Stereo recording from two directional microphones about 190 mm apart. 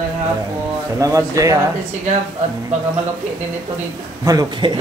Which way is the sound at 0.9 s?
15° right (ahead or behind).